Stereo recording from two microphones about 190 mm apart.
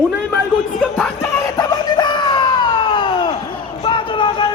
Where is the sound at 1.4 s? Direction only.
20° left (ahead or behind).